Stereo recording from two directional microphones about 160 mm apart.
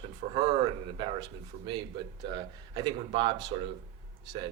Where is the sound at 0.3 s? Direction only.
30° right (ahead or behind).